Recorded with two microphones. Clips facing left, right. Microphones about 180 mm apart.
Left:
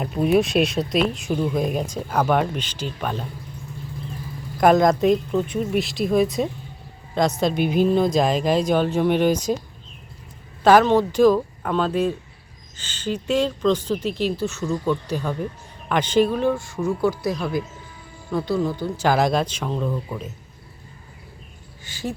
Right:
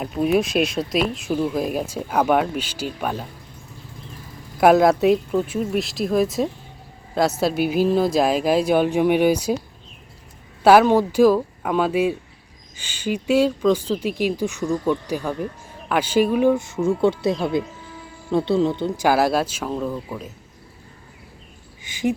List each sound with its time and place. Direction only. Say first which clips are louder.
0.0 s speech: left 1 dB; centre (ahead or behind)
4.6 s speech: right 2 dB; 5° right (ahead or behind)
10.6 s speech: right 1 dB; 10° right (ahead or behind); by 18.9 s 25° right (ahead or behind)
18.9 s speech: even; 10° right (ahead or behind)
21.8 s duck: right 7 dB; 20° right (ahead or behind)